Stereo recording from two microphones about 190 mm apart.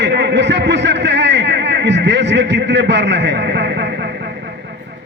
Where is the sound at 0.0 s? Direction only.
65° right (ahead or behind).